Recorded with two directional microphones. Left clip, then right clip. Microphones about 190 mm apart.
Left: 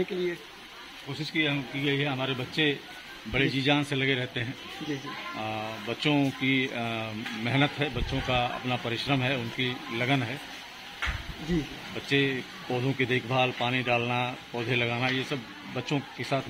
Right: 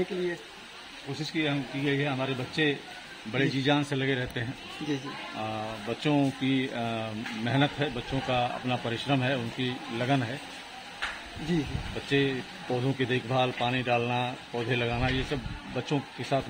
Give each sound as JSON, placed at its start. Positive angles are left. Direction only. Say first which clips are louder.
{"t": 1.2, "sound": "a man's voice", "louder": "left 2 dB", "side_deg": 0}
{"t": 12.1, "sound": "speech", "louder": "left 1 dB", "side_deg": -10}